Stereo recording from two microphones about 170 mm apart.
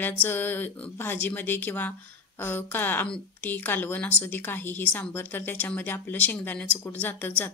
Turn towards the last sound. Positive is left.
turn(degrees=10)  # may be behind; listen again after turning